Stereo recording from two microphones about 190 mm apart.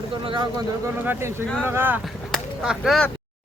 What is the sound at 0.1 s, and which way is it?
Speech, 25° right (ahead or behind).